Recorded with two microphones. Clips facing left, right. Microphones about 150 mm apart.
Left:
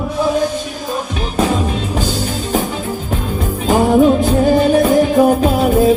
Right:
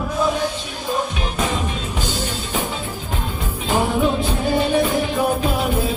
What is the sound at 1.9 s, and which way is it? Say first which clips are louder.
Music: left 6 dB; 40° left (ahead or behind).